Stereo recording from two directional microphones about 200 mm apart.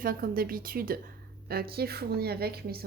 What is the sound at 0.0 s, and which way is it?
Speech, 45° right (ahead or behind).